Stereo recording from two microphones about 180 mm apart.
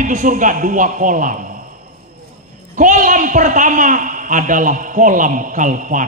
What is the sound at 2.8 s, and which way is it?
A man's voice, 45° right (ahead or behind).